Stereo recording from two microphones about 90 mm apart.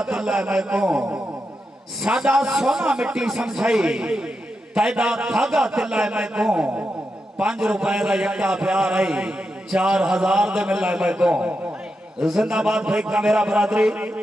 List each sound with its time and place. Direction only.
0.0 s a man's voice: 10° right (ahead or behind)